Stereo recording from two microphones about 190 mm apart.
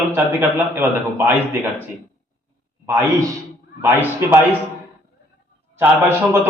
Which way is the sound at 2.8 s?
10° right (ahead or behind).